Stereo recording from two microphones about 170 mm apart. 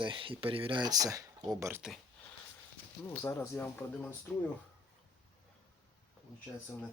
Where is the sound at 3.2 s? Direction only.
15° left (ahead or behind).